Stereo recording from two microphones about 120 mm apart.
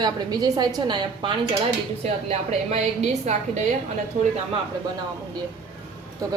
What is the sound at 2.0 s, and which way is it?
A woman's voice, 60° right (ahead or behind).